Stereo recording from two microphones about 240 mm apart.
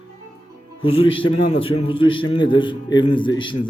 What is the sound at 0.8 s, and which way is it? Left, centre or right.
A man's voice, left.